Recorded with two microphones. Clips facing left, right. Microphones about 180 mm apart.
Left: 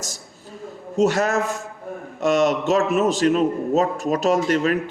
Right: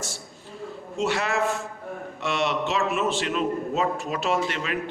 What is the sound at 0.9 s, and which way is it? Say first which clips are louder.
Speech: left 6 dB; 45° left (ahead or behind).